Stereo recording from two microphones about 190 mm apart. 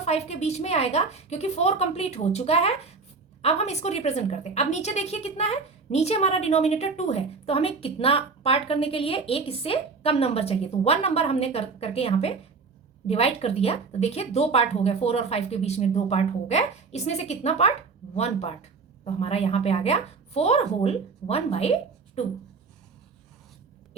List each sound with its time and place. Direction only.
0.0 s a woman's voice: 35° left (ahead or behind)